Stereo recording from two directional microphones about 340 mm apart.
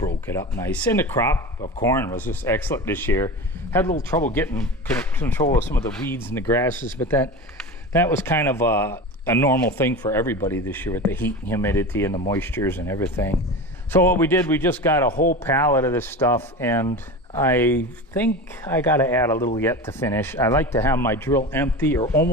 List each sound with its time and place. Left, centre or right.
0.3 s speech: centre
5.2 s speech: centre